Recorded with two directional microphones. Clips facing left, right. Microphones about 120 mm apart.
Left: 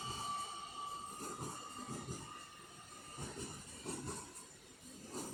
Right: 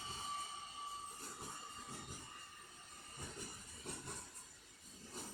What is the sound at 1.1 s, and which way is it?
Train, 45° left (ahead or behind).